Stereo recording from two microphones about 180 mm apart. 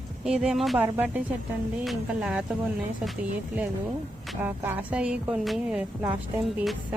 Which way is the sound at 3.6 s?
10° right (ahead or behind).